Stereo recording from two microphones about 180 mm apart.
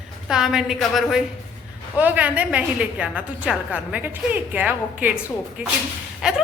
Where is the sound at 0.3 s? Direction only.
5° right (ahead or behind).